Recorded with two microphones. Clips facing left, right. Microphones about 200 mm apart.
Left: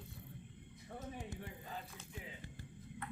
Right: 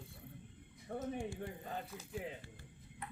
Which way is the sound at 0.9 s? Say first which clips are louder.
Right 7 dB; 50° right (ahead or behind).